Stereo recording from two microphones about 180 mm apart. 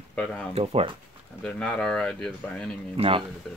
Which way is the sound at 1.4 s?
5° left (ahead or behind).